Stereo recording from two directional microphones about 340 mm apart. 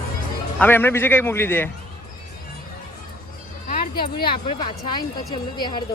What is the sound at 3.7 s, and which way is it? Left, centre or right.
Music, left.